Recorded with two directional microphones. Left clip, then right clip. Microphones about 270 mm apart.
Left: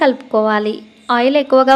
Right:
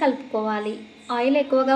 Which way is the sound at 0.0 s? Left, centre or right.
Left.